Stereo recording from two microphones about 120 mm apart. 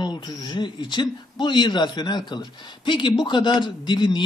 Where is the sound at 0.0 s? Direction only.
35° left (ahead or behind).